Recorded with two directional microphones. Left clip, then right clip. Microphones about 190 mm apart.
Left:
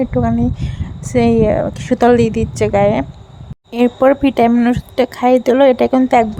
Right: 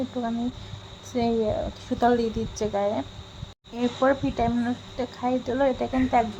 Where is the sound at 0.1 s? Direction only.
45° left (ahead or behind).